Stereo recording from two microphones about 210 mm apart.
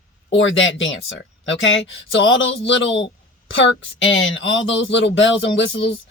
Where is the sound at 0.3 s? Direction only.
65° left (ahead or behind).